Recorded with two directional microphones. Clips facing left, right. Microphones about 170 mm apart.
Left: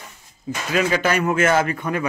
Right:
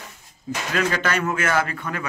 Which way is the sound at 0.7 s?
10° left (ahead or behind).